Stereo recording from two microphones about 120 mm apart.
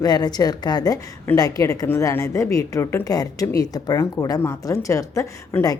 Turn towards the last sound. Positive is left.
turn(degrees=30)  # may be behind; listen again after turning